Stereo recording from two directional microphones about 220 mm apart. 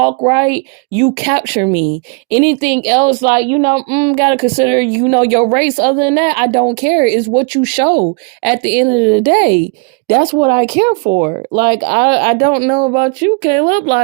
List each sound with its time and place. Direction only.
0.0 s speech: 40° right (ahead or behind)